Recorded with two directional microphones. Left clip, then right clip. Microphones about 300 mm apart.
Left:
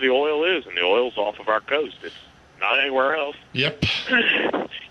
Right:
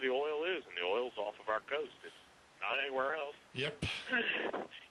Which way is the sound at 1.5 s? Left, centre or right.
Centre.